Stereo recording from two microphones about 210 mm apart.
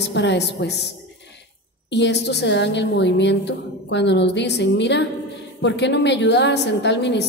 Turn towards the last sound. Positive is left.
turn(degrees=55)  # may be behind; listen again after turning